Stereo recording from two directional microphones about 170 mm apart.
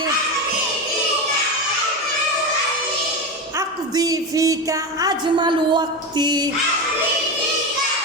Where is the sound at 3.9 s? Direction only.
20° right (ahead or behind).